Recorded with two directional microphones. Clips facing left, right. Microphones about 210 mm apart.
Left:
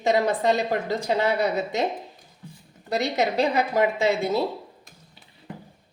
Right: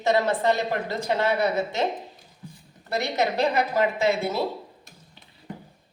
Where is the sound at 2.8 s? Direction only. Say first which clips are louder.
Left 1 dB; 15° left (ahead or behind).